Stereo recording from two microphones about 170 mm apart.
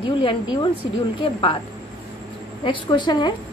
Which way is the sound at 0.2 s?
30° left (ahead or behind).